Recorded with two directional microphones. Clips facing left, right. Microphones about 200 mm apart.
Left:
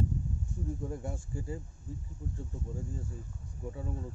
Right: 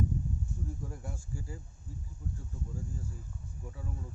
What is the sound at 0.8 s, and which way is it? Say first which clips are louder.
Speech: left 6 dB; 25° left (ahead or behind).